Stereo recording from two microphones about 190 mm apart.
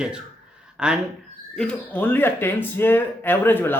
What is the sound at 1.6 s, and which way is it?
Speech, 5° left (ahead or behind).